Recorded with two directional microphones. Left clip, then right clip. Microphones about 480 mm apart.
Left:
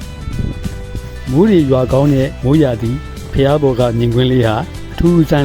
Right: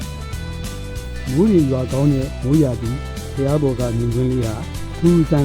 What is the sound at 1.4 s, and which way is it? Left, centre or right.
Speech, centre.